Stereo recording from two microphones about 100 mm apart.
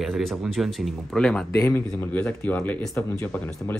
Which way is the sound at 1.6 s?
30° left (ahead or behind).